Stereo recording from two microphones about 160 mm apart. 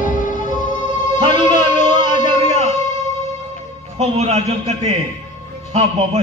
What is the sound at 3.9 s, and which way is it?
Speech, 40° right (ahead or behind).